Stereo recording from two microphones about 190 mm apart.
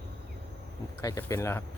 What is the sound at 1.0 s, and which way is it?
Speech, 15° left (ahead or behind).